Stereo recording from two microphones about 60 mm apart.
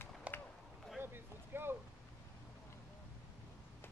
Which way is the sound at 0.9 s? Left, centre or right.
Right.